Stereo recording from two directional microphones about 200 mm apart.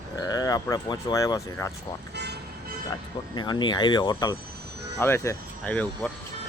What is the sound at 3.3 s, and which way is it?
Speech, 20° left (ahead or behind).